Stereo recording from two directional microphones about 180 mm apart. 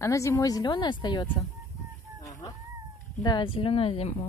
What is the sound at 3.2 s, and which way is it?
Speech, 25° left (ahead or behind).